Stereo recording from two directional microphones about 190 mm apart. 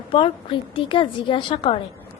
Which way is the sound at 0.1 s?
25° left (ahead or behind).